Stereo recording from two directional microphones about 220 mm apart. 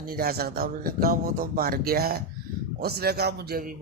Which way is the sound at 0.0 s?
45° right (ahead or behind).